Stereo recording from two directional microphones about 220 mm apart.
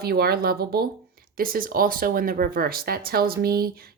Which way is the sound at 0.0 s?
45° right (ahead or behind).